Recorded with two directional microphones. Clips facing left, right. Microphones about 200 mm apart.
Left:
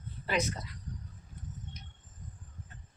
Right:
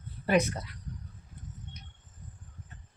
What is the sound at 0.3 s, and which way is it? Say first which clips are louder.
Speech: right 6 dB; 55° right (ahead or behind).